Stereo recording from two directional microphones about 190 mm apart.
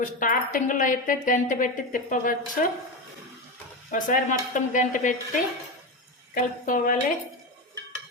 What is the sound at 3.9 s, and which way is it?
Speech, 45° left (ahead or behind).